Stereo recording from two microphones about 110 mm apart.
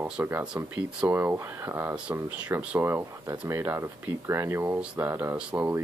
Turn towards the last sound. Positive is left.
turn(degrees=-15)  # may be behind; listen again after turning